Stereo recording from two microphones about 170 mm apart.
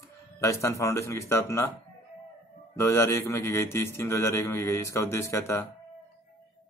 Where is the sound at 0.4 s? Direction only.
15° left (ahead or behind).